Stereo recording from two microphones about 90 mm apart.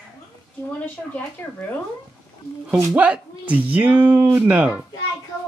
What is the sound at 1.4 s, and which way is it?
Speech, 20° left (ahead or behind).